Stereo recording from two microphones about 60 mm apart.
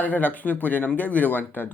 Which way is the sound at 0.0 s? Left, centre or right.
Left.